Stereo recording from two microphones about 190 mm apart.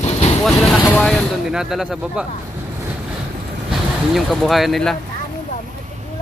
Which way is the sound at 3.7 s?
Centre (ahead or behind).